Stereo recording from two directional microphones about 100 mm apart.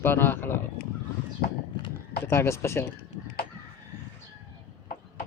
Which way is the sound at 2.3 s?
25° left (ahead or behind).